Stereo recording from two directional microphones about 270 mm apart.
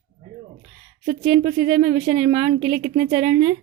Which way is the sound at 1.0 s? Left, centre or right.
Right.